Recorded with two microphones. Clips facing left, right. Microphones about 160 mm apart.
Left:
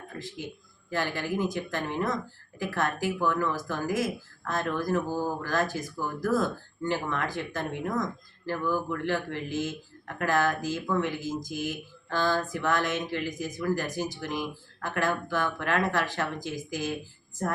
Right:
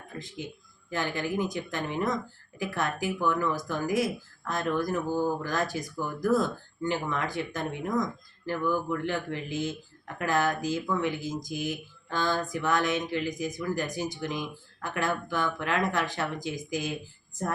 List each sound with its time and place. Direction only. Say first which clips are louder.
0.2 s speech: even; 20° right (ahead or behind)